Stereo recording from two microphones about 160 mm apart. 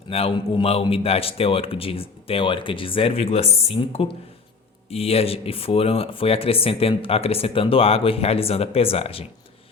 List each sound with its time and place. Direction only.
0.1 s speech: 35° left (ahead or behind)